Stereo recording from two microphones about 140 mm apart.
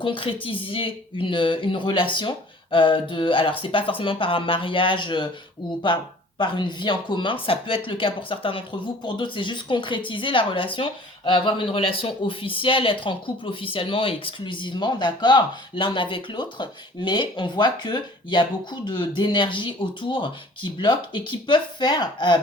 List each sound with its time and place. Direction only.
0.0 s speech: 40° left (ahead or behind)
6.4 s speech: 35° left (ahead or behind)